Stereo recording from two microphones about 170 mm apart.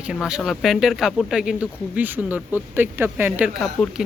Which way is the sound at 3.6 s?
Centre (ahead or behind).